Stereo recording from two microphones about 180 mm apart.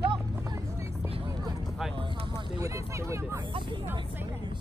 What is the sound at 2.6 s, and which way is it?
Speech, 15° right (ahead or behind).